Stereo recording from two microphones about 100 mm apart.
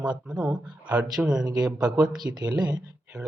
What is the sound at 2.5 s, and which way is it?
Speech, 45° right (ahead or behind).